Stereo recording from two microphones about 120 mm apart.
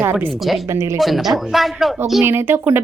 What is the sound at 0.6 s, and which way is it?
Speech, 25° right (ahead or behind).